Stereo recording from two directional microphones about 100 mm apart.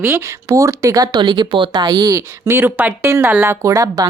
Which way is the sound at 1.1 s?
55° right (ahead or behind).